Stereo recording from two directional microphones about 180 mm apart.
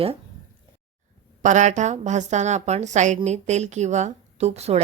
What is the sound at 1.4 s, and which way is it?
A woman's voice, 40° right (ahead or behind).